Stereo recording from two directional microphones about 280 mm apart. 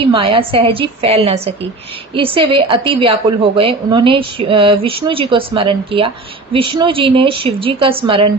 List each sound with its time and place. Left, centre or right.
0.0 s a woman's voice: centre